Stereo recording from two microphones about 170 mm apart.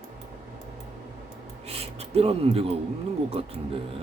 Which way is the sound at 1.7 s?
35° right (ahead or behind).